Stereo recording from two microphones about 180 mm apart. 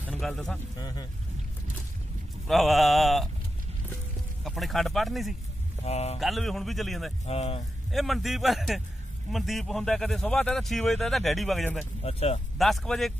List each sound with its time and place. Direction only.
0.1 s a man's voice: 5° left (ahead or behind)
0.7 s speech: 20° left (ahead or behind)
2.4 s speech: centre (ahead or behind)
4.5 s speech: centre (ahead or behind)
5.9 s speech: 35° left (ahead or behind)
6.1 s speech: centre (ahead or behind)
7.2 s speech: 35° left (ahead or behind)
7.9 s speech: centre (ahead or behind)
12.0 s speech: 35° left (ahead or behind)
12.5 s speech: centre (ahead or behind)